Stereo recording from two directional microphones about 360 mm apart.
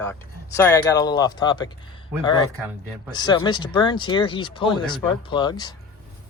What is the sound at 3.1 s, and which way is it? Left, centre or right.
Speech, centre.